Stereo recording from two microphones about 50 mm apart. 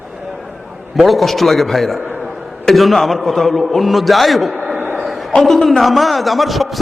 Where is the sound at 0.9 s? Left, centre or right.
Centre.